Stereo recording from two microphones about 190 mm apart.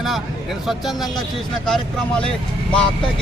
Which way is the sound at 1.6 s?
5° left (ahead or behind).